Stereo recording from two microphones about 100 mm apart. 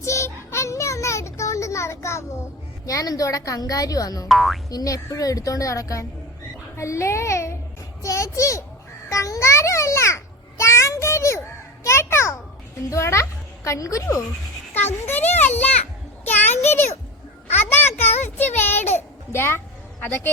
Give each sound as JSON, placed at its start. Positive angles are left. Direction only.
{"t": 0.0, "sound": "child singing", "side_deg": 30}
{"t": 2.8, "sound": "a woman's voice", "side_deg": 35}
{"t": 4.3, "sound": "speech", "side_deg": 0}
{"t": 4.7, "sound": "a woman's voice", "side_deg": 35}
{"t": 9.0, "sound": "babbling", "side_deg": 30}
{"t": 10.6, "sound": "a sound", "side_deg": 30}
{"t": 12.9, "sound": "a child's voice", "side_deg": 30}
{"t": 14.7, "sound": "a child's voice", "side_deg": 20}
{"t": 16.2, "sound": "a sound", "side_deg": 20}
{"t": 18.0, "sound": "a sound", "side_deg": 20}